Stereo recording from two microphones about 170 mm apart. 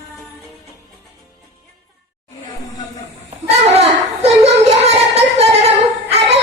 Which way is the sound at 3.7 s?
35° right (ahead or behind).